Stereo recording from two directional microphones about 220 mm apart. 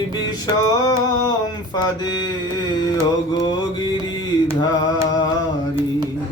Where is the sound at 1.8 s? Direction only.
20° left (ahead or behind).